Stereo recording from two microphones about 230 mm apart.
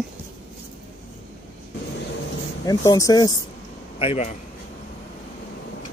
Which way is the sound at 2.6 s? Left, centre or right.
Centre.